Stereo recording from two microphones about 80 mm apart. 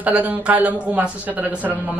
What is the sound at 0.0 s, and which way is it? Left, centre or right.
Speech, centre.